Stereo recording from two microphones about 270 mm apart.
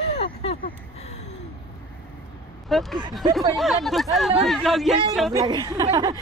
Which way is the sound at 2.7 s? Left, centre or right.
Centre.